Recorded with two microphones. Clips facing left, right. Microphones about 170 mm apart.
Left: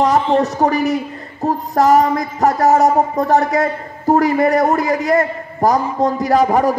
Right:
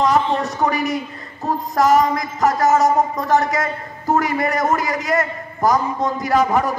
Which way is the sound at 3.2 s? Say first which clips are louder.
Left 4 dB; 35° left (ahead or behind).